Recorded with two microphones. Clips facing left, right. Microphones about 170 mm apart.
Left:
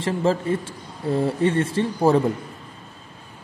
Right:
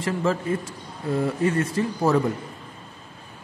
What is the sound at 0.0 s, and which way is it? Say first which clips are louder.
Speech: left 3 dB; 30° left (ahead or behind).